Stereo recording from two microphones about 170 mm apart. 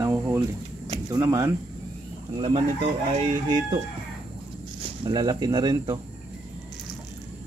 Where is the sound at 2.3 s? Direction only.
35° right (ahead or behind).